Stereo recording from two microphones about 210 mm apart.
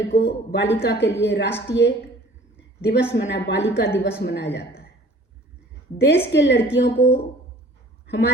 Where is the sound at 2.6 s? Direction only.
55° left (ahead or behind).